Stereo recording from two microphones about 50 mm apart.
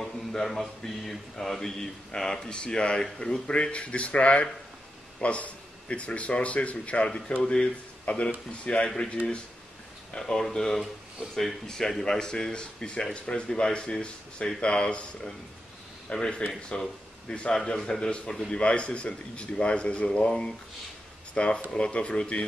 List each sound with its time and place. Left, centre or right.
0.0 s mantra: centre; by 4.5 s left
5.2 s a man's voice: left
8.6 s mantra: centre
10.1 s mantra: centre
14.4 s a man's voice: centre
16.1 s mantra: centre
16.6 s speech: centre
17.6 s mantra: centre
18.5 s a man's voice: left
20.1 s mantra: centre
21.4 s a man's voice: left